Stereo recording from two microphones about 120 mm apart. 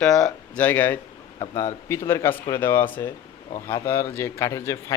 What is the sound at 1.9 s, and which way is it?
Speech, 20° left (ahead or behind).